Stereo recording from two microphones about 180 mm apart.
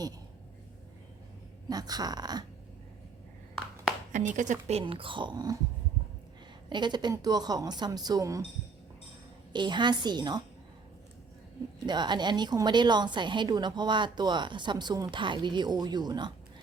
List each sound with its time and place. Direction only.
1.7 s a woman's voice: 20° right (ahead or behind)
4.4 s speech: 45° right (ahead or behind)
4.8 s a woman's voice: 30° right (ahead or behind)
6.7 s a woman's voice: 25° right (ahead or behind)
9.5 s a woman's voice: 25° right (ahead or behind)
11.9 s a woman's voice: 25° right (ahead or behind)